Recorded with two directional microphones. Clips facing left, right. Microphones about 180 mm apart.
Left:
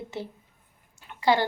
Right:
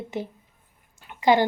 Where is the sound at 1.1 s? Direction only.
15° right (ahead or behind).